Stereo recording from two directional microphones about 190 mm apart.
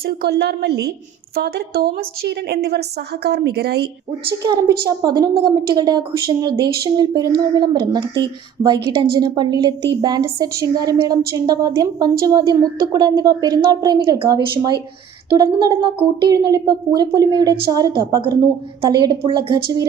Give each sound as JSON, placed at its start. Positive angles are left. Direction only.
{"t": 0.0, "sound": "a woman's voice", "side_deg": -55}
{"t": 4.4, "sound": "a woman's voice", "side_deg": -20}